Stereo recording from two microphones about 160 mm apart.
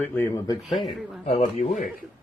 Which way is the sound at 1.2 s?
40° left (ahead or behind).